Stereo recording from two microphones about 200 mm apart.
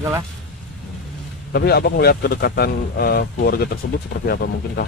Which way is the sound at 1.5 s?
50° left (ahead or behind).